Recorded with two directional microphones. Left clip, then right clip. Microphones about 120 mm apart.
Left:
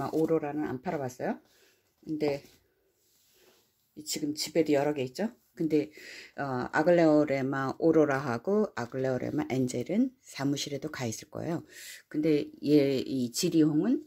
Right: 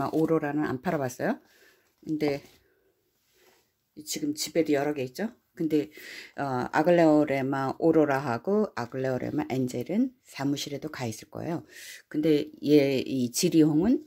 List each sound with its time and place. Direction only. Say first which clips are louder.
0.0 s speech: right 2 dB; 15° right (ahead or behind)
0.3 s speech: right 3 dB; 35° right (ahead or behind)
2.0 s speech: right 2 dB; 25° right (ahead or behind)
3.9 s speech: right 2 dB; centre (ahead or behind); by 13.9 s 30° right (ahead or behind)